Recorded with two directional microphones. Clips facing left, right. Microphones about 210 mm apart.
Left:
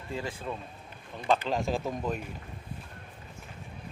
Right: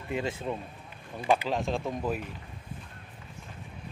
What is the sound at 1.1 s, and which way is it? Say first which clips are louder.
Speech: right 1 dB; 10° right (ahead or behind).